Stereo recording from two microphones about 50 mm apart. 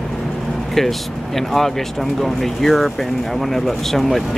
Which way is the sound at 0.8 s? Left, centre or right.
Centre.